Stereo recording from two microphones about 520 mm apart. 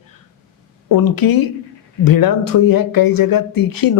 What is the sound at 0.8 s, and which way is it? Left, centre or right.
Speech, left.